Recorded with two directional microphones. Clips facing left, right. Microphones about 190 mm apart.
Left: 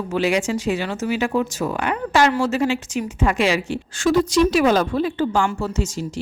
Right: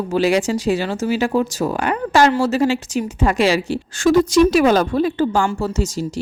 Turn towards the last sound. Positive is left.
turn(degrees=-40)  # may be behind; listen again after turning